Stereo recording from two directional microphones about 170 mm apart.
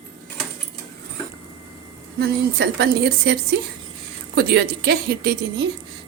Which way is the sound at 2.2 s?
75° right (ahead or behind).